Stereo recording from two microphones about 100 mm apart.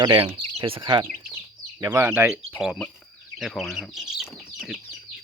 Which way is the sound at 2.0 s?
25° right (ahead or behind).